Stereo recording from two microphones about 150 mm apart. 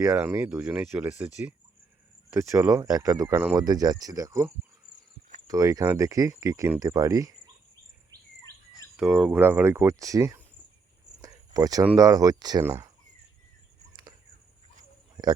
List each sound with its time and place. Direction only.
0.0 s speech: 15° right (ahead or behind)
2.3 s speech: 20° right (ahead or behind)
9.0 s speech: centre (ahead or behind)
9.3 s speech: 15° right (ahead or behind)
11.2 s a sound: 25° right (ahead or behind)
11.9 s speech: 25° right (ahead or behind)
12.6 s speech: 15° right (ahead or behind)